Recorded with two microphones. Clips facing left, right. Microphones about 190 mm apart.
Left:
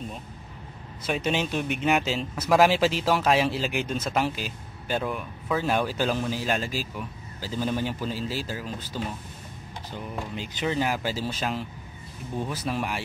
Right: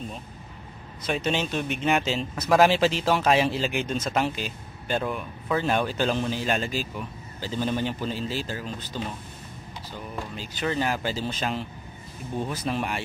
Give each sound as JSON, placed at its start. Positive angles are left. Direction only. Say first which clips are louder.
{"t": 1.0, "sound": "speech", "louder": "even", "side_deg": 10}
{"t": 10.1, "sound": "speech", "louder": "left 1 dB", "side_deg": 20}